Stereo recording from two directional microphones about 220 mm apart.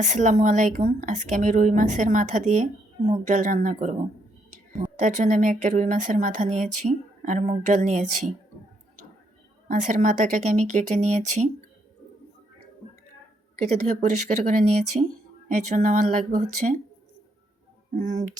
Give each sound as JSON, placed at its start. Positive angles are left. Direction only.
{"t": 0.0, "sound": "speech", "side_deg": -35}
{"t": 4.9, "sound": "speech", "side_deg": -35}
{"t": 9.6, "sound": "speech", "side_deg": -35}
{"t": 13.7, "sound": "speech", "side_deg": -35}
{"t": 17.9, "sound": "speech", "side_deg": -35}